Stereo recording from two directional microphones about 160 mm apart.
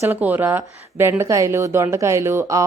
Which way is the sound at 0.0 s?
10° right (ahead or behind).